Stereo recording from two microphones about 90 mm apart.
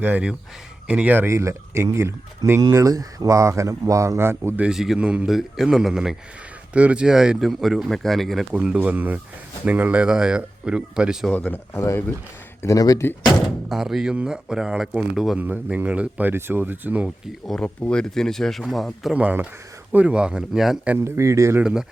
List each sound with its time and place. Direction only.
0.0 s speech: 15° right (ahead or behind)
1.3 s speech: 30° right (ahead or behind)
4.6 s speech: 5° right (ahead or behind)
8.5 s speech: 15° right (ahead or behind)
11.3 s speech: 15° left (ahead or behind)
12.6 s speech: 40° left (ahead or behind)
13.7 s speech: 5° right (ahead or behind)
15.4 s speech: 20° right (ahead or behind)
17.4 s speech: 10° left (ahead or behind)
19.1 s speech: 15° right (ahead or behind)
21.0 s speech: 35° right (ahead or behind)
21.6 s speech: 10° right (ahead or behind)